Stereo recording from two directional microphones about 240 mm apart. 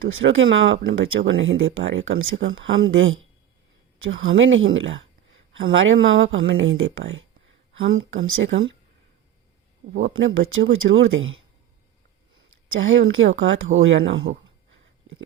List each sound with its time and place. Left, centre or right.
0.1 s speech: right
10.0 s speech: right
12.8 s speech: right